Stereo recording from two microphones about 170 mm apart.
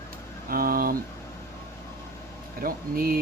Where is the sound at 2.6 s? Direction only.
60° right (ahead or behind).